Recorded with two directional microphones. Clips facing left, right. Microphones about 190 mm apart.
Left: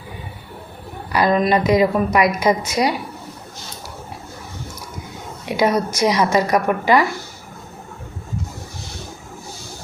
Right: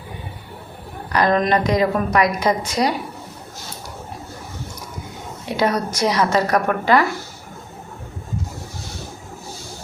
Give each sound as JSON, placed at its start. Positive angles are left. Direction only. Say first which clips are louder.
{"t": 1.1, "sound": "a woman's voice", "louder": "left 1 dB", "side_deg": 5}
{"t": 5.5, "sound": "a woman's voice", "louder": "left 2 dB", "side_deg": 10}